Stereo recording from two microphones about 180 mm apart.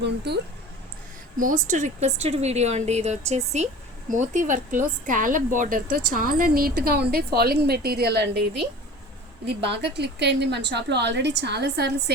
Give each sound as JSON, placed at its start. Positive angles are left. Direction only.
{"t": 0.0, "sound": "a woman's voice", "side_deg": -70}
{"t": 1.4, "sound": "a woman's voice", "side_deg": -45}